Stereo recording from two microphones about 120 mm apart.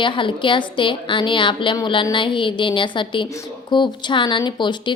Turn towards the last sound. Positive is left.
turn(degrees=40)  # may be behind; listen again after turning